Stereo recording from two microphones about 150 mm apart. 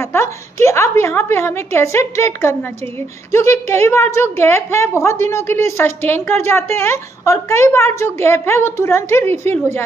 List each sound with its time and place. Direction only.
0.0 s a woman's voice: 20° left (ahead or behind)